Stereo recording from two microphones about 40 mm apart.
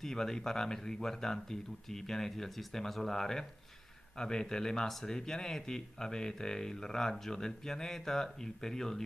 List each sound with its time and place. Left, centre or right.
0.0 s speech: centre